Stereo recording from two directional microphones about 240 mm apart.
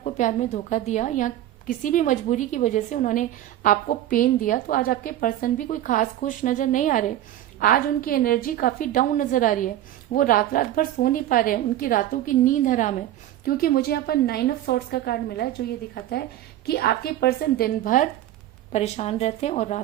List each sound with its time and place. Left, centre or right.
0.0 s a woman's voice: left
16.6 s a woman's voice: left